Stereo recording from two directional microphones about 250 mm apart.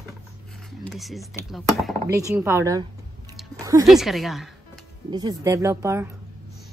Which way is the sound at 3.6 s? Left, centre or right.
Centre.